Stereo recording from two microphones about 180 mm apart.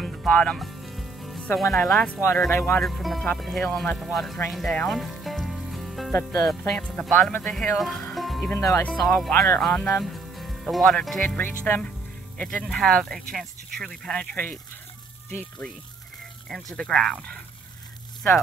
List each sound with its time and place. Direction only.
0.0 s music: centre (ahead or behind)
1.7 s speech: centre (ahead or behind)
2.8 s speech: centre (ahead or behind)
4.5 s music: centre (ahead or behind)
6.1 s speech: 15° left (ahead or behind)
6.7 s speech: 5° left (ahead or behind)
8.5 s speech: 15° left (ahead or behind)
9.0 s speech: centre (ahead or behind)
16.7 s speech: centre (ahead or behind)